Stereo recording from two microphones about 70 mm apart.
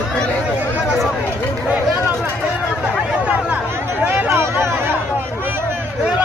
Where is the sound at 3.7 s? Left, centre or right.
Right.